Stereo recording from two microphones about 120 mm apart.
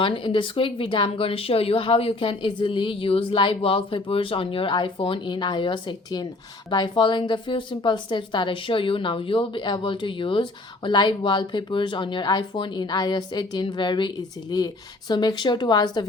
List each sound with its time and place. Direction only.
0.0 s a woman's voice: 45° left (ahead or behind)